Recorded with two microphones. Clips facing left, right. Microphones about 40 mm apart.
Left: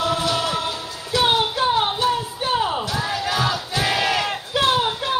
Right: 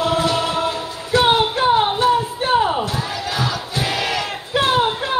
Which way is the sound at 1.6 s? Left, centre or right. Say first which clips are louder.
Right 4 dB; right.